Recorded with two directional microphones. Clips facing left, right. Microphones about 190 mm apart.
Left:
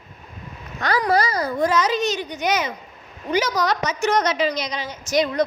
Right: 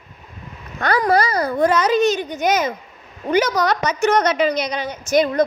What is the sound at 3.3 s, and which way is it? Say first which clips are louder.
A woman's voice: right 3 dB; 55° right (ahead or behind).